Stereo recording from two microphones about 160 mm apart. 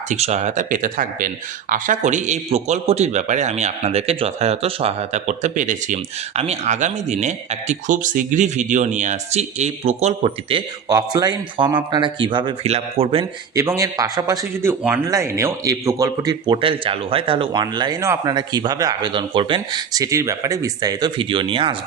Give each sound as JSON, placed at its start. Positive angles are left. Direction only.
{"t": 0.1, "sound": "a man's voice", "side_deg": -45}
{"t": 10.8, "sound": "speech", "side_deg": -25}
{"t": 13.6, "sound": "a man's voice", "side_deg": -20}